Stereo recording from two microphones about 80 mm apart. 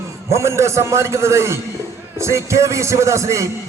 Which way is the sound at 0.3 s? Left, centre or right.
Right.